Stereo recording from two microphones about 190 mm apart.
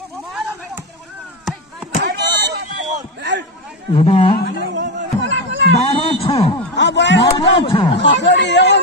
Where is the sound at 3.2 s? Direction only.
65° right (ahead or behind).